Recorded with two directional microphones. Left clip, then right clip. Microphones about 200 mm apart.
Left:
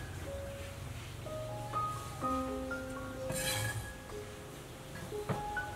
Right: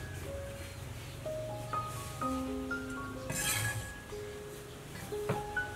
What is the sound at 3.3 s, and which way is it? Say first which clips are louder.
Dishes: right 1 dB; centre (ahead or behind).